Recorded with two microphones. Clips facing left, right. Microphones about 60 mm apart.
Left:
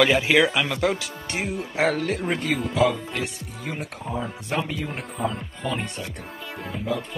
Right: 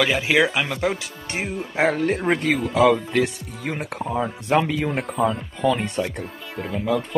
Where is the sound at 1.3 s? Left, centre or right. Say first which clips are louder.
Right 1 dB; right.